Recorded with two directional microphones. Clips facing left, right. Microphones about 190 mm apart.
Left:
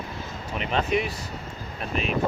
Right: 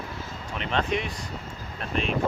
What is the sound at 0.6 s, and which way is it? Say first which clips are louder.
Speech: left 2 dB; 5° left (ahead or behind).